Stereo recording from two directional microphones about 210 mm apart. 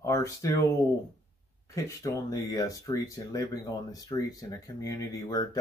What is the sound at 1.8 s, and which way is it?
Speech, 15° left (ahead or behind).